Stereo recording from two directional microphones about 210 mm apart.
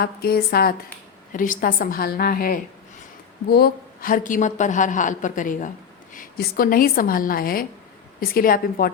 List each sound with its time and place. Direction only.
0.0 s a woman's voice: 45° left (ahead or behind)